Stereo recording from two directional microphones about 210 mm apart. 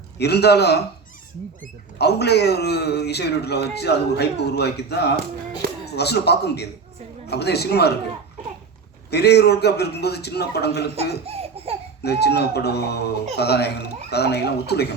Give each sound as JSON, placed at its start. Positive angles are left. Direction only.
{"t": 0.2, "sound": "speech", "side_deg": 50}
{"t": 2.0, "sound": "speech", "side_deg": 50}
{"t": 9.0, "sound": "speech", "side_deg": 50}
{"t": 11.3, "sound": "laughter", "side_deg": -30}
{"t": 12.0, "sound": "speech", "side_deg": 50}